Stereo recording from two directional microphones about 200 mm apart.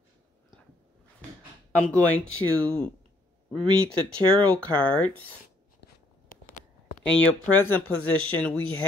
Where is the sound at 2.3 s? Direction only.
90° left.